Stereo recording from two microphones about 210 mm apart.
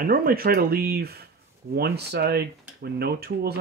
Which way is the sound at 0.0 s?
45° right (ahead or behind).